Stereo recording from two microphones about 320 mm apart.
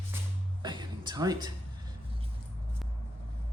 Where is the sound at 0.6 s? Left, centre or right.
Centre.